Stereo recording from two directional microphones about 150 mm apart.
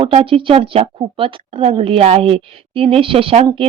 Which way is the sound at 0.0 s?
40° right (ahead or behind).